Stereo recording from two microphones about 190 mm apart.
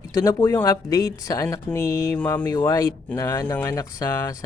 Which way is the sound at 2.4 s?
20° left (ahead or behind).